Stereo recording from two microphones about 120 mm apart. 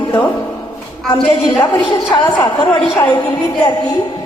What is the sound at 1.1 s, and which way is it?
A woman's voice, 35° left (ahead or behind).